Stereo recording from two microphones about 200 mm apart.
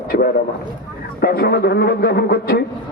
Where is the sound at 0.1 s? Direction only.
40° left (ahead or behind).